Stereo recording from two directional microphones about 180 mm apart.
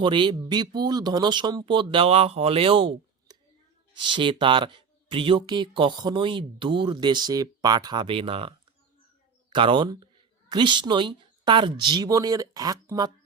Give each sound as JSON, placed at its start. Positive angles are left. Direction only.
{"t": 0.0, "sound": "speech", "side_deg": -25}